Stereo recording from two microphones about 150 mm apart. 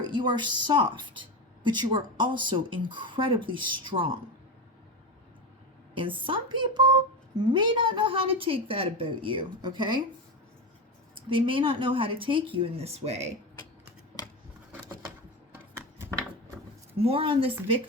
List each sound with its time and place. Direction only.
0.0 s a woman's voice: 30° right (ahead or behind)
5.9 s a woman's voice: 35° right (ahead or behind)
11.1 s a woman's voice: 35° right (ahead or behind)
15.7 s a sound: 15° right (ahead or behind)
17.0 s a woman's voice: 40° right (ahead or behind)